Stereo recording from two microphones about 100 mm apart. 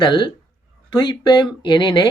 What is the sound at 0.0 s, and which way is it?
Speech, 50° left (ahead or behind).